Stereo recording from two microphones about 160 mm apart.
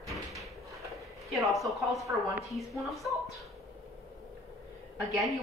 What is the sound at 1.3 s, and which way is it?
A woman's voice, centre (ahead or behind).